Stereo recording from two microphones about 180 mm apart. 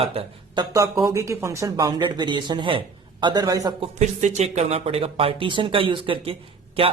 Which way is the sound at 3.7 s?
40° right (ahead or behind).